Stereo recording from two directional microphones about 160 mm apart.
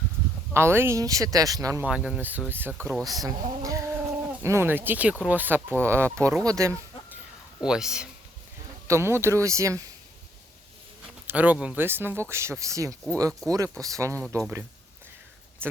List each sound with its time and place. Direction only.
0.5 s speech: 15° right (ahead or behind)
1.8 s speech: 5° right (ahead or behind)
7.6 s speech: 5° right (ahead or behind)
8.9 s speech: 15° right (ahead or behind)
11.3 s speech: 10° right (ahead or behind)
13.4 s speech: 5° left (ahead or behind)
13.8 s speech: 20° right (ahead or behind)
15.6 s speech: 15° right (ahead or behind)